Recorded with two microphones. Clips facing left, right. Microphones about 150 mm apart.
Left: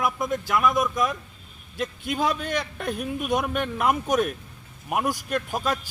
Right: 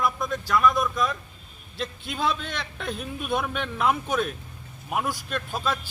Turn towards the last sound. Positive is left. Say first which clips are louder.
# left 3 dB
turn(degrees=15)  # may be behind; listen again after turning